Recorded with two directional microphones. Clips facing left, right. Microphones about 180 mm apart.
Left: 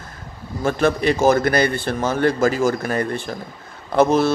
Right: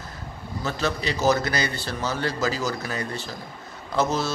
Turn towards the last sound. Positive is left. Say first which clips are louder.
# left 8 dB
turn(degrees=55)  # may be behind; listen again after turning